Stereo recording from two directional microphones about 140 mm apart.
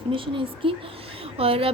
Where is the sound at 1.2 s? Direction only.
40° right (ahead or behind).